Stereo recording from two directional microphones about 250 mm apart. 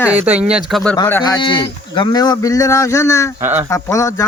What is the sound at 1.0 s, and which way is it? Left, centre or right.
Speech, centre.